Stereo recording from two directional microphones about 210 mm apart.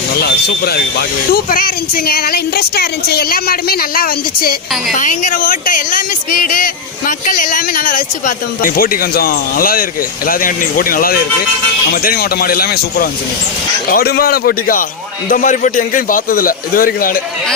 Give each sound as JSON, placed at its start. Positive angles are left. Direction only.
{"t": 0.2, "sound": "a man's voice", "side_deg": 50}